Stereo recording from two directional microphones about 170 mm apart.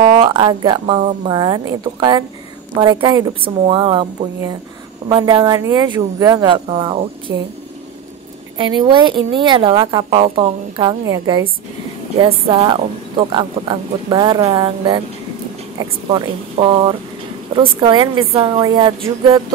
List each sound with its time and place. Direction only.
0.0 s a woman's voice: 30° right (ahead or behind)
8.5 s a woman's voice: 30° right (ahead or behind)
12.2 s a woman's voice: 35° right (ahead or behind)
16.1 s a woman's voice: 30° right (ahead or behind)